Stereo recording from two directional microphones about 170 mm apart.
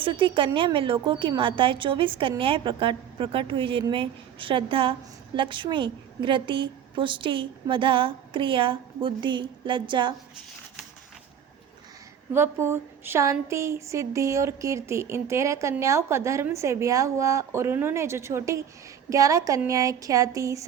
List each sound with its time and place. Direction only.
0.0 s a woman's voice: 30° right (ahead or behind)
12.3 s a woman's voice: 15° right (ahead or behind)